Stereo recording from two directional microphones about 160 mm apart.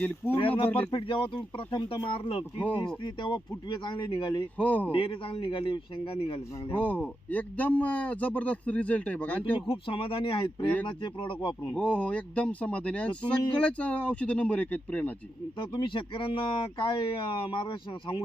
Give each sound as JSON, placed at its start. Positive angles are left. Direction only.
{"t": 0.3, "sound": "speech", "side_deg": 35}
{"t": 4.5, "sound": "speech", "side_deg": 10}
{"t": 4.9, "sound": "speech", "side_deg": 35}
{"t": 6.7, "sound": "speech", "side_deg": 10}
{"t": 9.4, "sound": "speech", "side_deg": 35}
{"t": 11.7, "sound": "speech", "side_deg": 10}
{"t": 15.5, "sound": "speech", "side_deg": 30}